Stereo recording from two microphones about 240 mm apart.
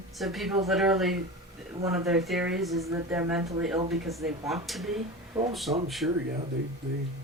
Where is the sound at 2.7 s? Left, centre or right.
Centre.